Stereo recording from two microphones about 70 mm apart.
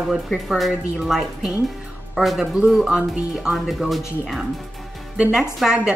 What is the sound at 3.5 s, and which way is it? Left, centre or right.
A woman's voice, centre.